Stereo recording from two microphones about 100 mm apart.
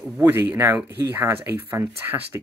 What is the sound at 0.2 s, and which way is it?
Speech, 20° right (ahead or behind).